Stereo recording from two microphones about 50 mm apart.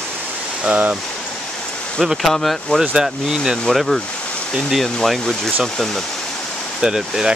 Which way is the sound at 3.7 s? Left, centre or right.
Centre.